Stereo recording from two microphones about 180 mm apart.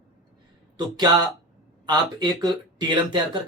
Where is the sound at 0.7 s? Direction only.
25° right (ahead or behind).